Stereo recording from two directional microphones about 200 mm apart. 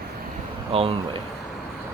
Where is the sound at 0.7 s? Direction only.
30° right (ahead or behind).